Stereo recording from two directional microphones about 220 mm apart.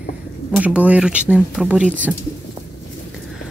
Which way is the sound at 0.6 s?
5° right (ahead or behind).